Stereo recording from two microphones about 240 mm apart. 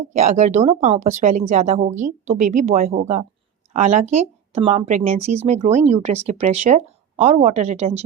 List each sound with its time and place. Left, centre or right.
0.1 s speech: right